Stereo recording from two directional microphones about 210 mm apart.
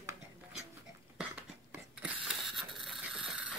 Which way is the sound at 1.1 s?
5° right (ahead or behind).